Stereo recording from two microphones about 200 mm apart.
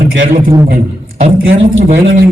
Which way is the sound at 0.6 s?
35° right (ahead or behind).